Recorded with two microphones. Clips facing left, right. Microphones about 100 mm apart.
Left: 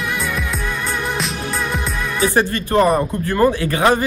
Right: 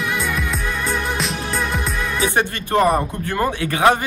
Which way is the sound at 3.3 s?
40° left (ahead or behind).